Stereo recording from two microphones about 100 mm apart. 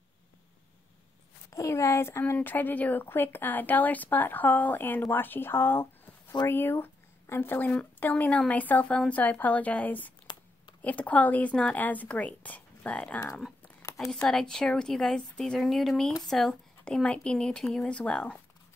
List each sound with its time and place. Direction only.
1.5 s a woman's voice: 30° left (ahead or behind); by 13.2 s 15° left (ahead or behind)
14.2 s a woman's voice: 5° left (ahead or behind)